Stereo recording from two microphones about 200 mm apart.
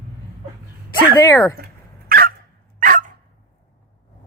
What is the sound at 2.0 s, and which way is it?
Dog, 50° right (ahead or behind).